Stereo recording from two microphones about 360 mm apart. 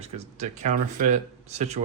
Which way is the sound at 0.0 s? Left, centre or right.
Centre.